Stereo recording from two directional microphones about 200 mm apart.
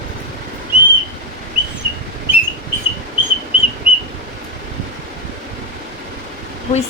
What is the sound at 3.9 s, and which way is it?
Whistle, 45° right (ahead or behind).